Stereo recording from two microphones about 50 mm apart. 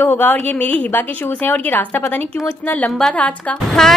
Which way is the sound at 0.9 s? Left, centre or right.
Left.